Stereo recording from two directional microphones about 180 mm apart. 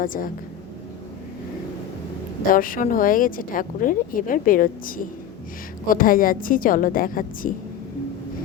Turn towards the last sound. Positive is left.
turn(degrees=50)  # may be behind; listen again after turning